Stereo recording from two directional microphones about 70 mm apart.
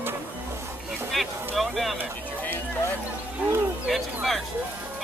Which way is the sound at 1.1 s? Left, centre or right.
Centre.